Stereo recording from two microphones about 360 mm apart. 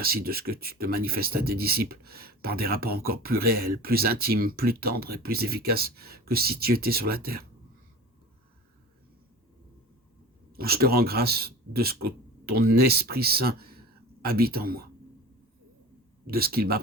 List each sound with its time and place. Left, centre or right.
0.0 s speech: right
10.5 s speech: right
16.2 s speech: right